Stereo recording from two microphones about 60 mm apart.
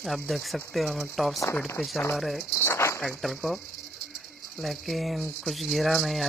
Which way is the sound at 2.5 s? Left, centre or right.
Left.